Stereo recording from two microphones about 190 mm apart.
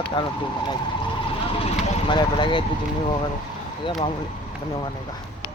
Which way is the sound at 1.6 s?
25° left (ahead or behind).